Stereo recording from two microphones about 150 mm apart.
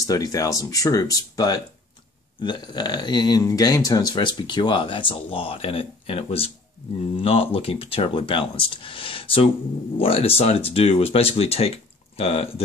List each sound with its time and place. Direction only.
0.0 s speech: 25° left (ahead or behind); by 12.6 s 40° left (ahead or behind)